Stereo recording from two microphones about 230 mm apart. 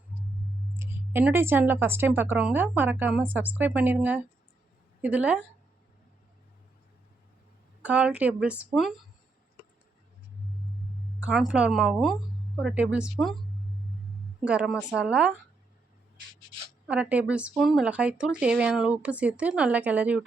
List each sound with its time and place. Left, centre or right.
0.8 s speech: centre
7.8 s speech: centre
11.2 s speech: centre
14.4 s speech: centre
16.8 s speech: centre